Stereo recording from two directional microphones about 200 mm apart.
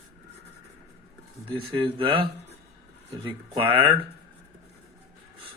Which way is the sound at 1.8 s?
25° right (ahead or behind).